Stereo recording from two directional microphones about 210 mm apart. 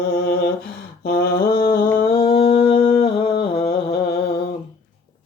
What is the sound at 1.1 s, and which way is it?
Mantra, 45° left (ahead or behind).